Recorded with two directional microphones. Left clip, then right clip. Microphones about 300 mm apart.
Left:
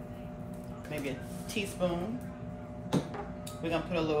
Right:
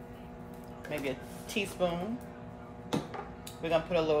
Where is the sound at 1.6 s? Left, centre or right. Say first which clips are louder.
Right 2 dB; right.